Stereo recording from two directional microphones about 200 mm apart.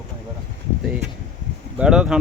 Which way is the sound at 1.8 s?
5° right (ahead or behind).